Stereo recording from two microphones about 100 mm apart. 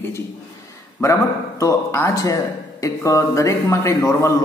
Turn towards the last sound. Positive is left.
turn(degrees=30)  # may be behind; listen again after turning